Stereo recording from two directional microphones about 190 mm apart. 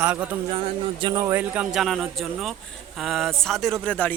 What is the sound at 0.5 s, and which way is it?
Speech, 25° right (ahead or behind).